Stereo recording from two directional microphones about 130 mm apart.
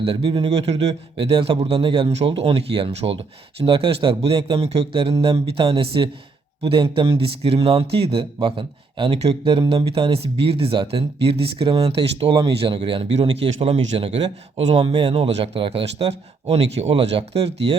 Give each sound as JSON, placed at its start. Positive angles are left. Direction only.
{"t": 0.0, "sound": "speech", "side_deg": -45}